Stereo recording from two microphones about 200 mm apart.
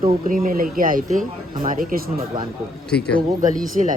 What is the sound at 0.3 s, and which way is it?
Speech, 45° right (ahead or behind).